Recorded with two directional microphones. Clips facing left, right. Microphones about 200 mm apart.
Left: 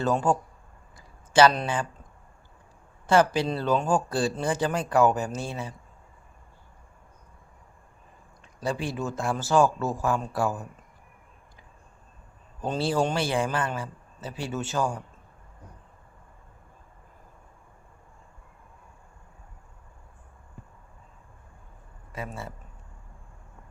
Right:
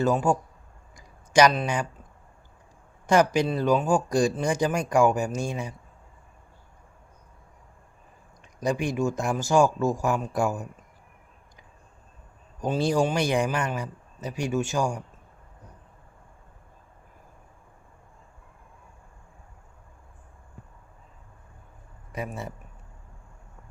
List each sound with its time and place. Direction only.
0.0 s speech: 10° right (ahead or behind)
0.9 s a sound: 15° right (ahead or behind)
1.6 s speech: 15° right (ahead or behind)
3.1 s speech: 15° right (ahead or behind)
8.6 s speech: 15° right (ahead or behind)
12.5 s speech: 10° right (ahead or behind)
22.1 s speech: 20° right (ahead or behind)